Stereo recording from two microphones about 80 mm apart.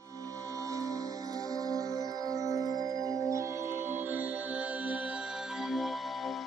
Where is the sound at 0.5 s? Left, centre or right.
Right.